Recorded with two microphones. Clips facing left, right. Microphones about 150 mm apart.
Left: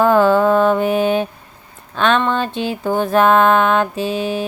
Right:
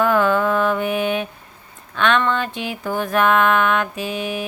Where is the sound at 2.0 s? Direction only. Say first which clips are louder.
Left 2 dB; 35° left (ahead or behind).